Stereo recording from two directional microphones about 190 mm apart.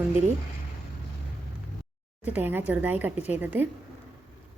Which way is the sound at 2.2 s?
10° right (ahead or behind).